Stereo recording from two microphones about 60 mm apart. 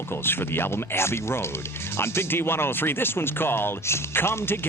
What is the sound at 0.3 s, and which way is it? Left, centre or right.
Speech, left.